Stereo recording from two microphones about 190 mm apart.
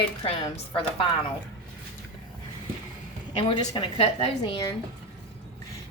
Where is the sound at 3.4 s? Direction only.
25° left (ahead or behind).